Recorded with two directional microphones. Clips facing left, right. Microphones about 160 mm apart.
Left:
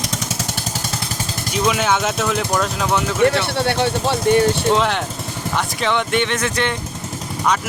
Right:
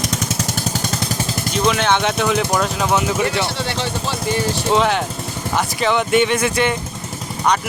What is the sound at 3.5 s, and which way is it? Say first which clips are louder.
Speech: left 5 dB; 60° left (ahead or behind).